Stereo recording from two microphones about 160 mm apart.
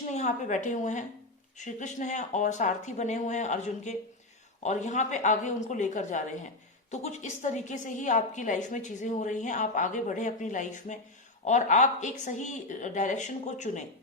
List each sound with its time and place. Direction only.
0.1 s a woman's voice: 50° left (ahead or behind)